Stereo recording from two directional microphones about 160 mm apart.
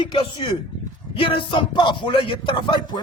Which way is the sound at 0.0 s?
30° left (ahead or behind).